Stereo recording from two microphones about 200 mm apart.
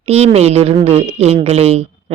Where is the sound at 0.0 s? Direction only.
30° right (ahead or behind).